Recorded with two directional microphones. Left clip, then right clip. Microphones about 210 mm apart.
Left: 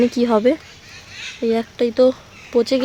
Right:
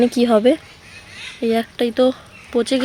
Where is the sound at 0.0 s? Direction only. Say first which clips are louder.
Right 1 dB; centre (ahead or behind).